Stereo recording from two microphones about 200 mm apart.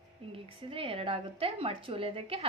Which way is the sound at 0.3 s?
25° right (ahead or behind).